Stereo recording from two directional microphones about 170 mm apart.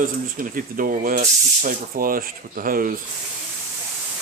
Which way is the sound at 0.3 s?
55° right (ahead or behind).